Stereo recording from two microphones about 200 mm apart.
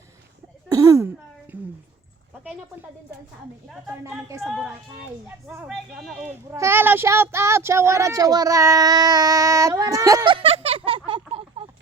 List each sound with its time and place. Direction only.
0.7 s a sound: 15° right (ahead or behind)
3.7 s speech: 10° right (ahead or behind)
4.4 s speech: centre (ahead or behind); by 11.6 s 30° right (ahead or behind)